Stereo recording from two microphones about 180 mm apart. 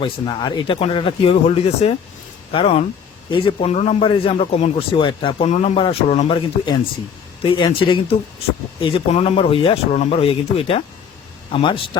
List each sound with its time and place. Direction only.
0.0 s a man's voice: 25° left (ahead or behind)